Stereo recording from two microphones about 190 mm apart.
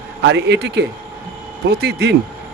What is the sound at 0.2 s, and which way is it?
Speech, 65° right (ahead or behind).